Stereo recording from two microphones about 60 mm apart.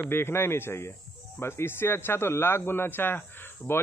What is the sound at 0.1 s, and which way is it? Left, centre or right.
A man's voice, left.